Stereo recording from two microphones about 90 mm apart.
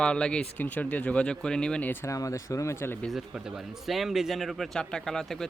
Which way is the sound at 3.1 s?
5° right (ahead or behind).